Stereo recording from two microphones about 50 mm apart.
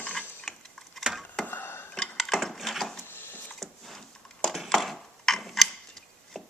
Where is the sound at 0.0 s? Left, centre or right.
Left.